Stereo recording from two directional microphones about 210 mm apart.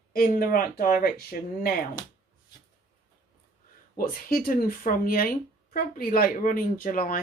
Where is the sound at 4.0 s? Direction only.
45° left (ahead or behind).